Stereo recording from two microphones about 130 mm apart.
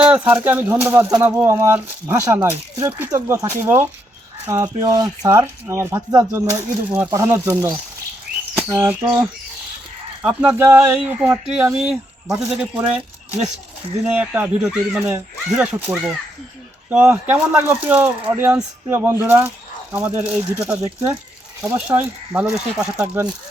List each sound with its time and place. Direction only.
0.0 s speech: 10° right (ahead or behind)
8.8 s speech: 15° right (ahead or behind)
10.2 s speech: 10° right (ahead or behind)
21.8 s speech: 15° right (ahead or behind)